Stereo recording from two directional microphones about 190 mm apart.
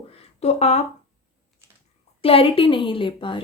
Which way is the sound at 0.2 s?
35° left (ahead or behind).